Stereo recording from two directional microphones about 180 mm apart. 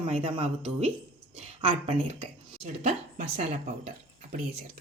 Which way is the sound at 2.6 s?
40° right (ahead or behind).